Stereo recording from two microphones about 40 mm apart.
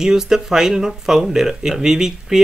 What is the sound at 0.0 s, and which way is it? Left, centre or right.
Speech, centre.